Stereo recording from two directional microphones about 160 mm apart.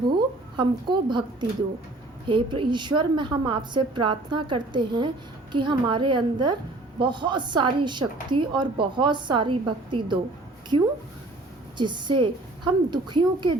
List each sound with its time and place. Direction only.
0.5 s a woman's voice: 30° right (ahead or behind)